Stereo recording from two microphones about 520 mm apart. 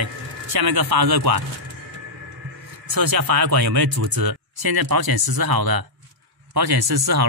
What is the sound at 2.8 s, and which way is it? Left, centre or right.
Speech, right.